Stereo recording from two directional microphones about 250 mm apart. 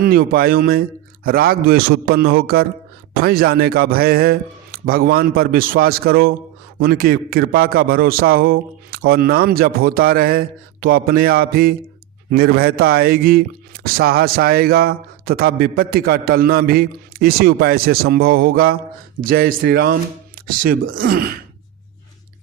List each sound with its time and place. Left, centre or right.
0.0 s speech: right